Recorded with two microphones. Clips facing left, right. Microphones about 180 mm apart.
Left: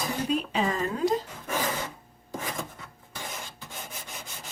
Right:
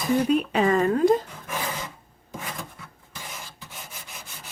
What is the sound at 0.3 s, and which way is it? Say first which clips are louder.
Speech: right 6 dB; 60° right (ahead or behind).